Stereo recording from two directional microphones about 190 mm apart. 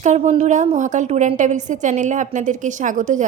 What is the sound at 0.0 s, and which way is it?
A woman's voice, 35° right (ahead or behind).